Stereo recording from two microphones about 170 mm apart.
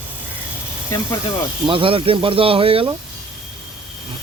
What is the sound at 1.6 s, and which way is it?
Speech, 30° right (ahead or behind).